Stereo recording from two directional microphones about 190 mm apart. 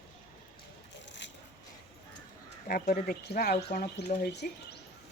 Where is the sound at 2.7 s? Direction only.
50° left (ahead or behind).